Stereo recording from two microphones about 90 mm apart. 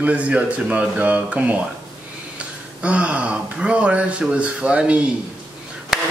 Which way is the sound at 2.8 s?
15° right (ahead or behind).